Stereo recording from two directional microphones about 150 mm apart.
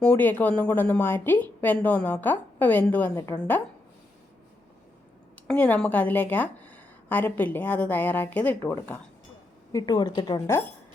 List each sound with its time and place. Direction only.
0.0 s a woman's voice: 10° left (ahead or behind)
5.5 s a woman's voice: 10° left (ahead or behind)
9.7 s a woman's voice: 25° left (ahead or behind)